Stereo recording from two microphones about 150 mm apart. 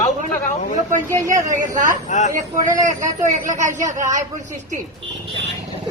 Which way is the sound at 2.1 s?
50° left (ahead or behind).